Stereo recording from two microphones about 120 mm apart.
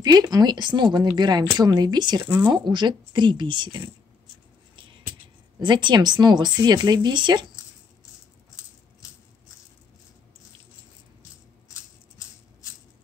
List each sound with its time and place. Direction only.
0.0 s speech: 35° right (ahead or behind)
5.6 s speech: 40° right (ahead or behind)